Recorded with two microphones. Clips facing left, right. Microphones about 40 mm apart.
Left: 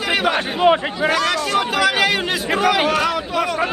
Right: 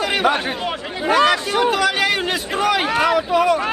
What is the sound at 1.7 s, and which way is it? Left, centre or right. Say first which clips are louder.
Speech: left 1 dB; centre.